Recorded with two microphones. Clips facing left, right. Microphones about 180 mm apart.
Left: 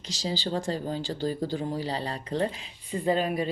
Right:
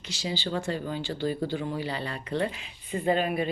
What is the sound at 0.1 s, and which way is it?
Speech, 35° left (ahead or behind).